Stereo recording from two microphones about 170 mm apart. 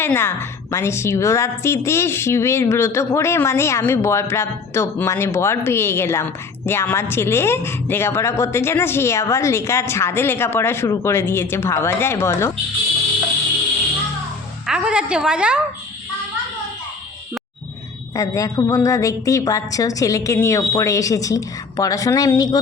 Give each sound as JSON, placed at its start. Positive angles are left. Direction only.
{"t": 0.0, "sound": "a woman's voice", "side_deg": 15}
{"t": 14.7, "sound": "a woman's voice", "side_deg": -5}
{"t": 18.1, "sound": "a woman's voice", "side_deg": 20}